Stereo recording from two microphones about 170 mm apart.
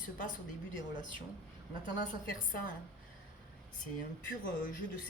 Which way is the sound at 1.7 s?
50° left (ahead or behind).